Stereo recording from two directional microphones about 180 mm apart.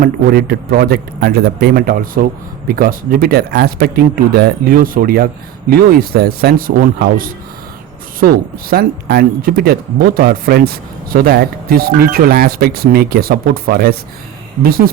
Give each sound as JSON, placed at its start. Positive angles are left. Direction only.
{"t": 0.0, "sound": "speech", "side_deg": -55}